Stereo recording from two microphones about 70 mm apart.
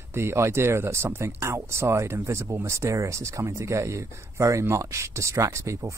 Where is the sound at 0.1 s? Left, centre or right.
Right.